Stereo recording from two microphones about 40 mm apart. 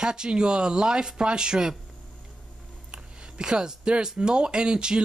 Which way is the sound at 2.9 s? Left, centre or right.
Right.